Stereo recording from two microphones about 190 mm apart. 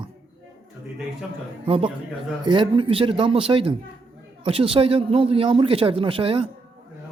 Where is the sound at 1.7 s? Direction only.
30° right (ahead or behind).